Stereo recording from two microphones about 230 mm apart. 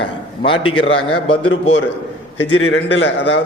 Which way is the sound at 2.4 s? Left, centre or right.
Left.